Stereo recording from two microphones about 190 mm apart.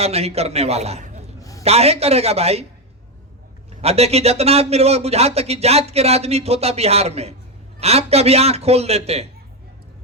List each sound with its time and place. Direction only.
0.0 s speech: 35° right (ahead or behind)
1.4 s a sound: 15° left (ahead or behind)
1.6 s speech: 35° right (ahead or behind)
3.8 s speech: 35° right (ahead or behind)